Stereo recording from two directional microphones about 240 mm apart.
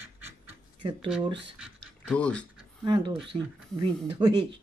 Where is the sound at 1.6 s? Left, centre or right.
Centre.